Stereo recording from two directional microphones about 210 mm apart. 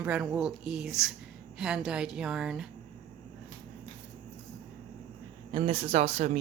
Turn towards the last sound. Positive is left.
turn(degrees=-30)  # may be behind; listen again after turning